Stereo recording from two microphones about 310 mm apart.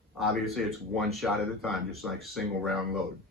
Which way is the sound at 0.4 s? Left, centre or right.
Centre.